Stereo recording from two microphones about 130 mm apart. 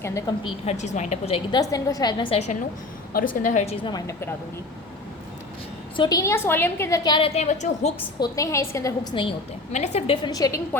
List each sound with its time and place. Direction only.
0.0 s a woman's voice: 25° left (ahead or behind)
0.6 s a woman's voice: 60° left (ahead or behind)
1.5 s a woman's voice: 30° left (ahead or behind)
3.2 s a woman's voice: 80° left
3.8 s a woman's voice: 30° left (ahead or behind)
6.0 s a woman's voice: 30° left (ahead or behind)
7.0 s a woman's voice: 40° left (ahead or behind); by 7.9 s 65° left (ahead or behind)
8.2 s a woman's voice: 25° left (ahead or behind)
9.7 s a woman's voice: 60° left (ahead or behind)
10.2 s a woman's voice: 30° left (ahead or behind)